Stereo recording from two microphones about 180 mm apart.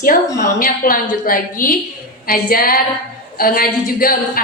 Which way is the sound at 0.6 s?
50° left (ahead or behind).